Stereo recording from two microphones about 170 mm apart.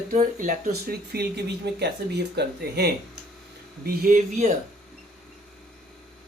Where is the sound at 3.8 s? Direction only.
65° right (ahead or behind).